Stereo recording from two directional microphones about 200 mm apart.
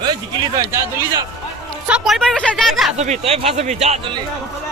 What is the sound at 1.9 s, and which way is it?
Speech, centre (ahead or behind).